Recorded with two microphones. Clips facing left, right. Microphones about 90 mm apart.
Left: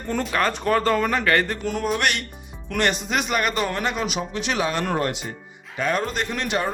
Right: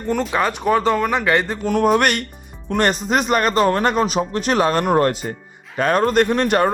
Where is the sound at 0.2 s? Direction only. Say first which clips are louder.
Right 3 dB; 10° right (ahead or behind).